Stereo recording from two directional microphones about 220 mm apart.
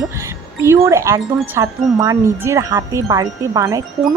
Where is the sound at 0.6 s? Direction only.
10° right (ahead or behind).